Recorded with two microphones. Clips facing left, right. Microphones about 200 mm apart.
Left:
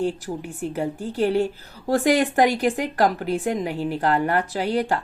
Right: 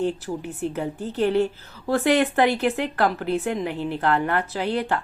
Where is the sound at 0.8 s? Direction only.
10° left (ahead or behind).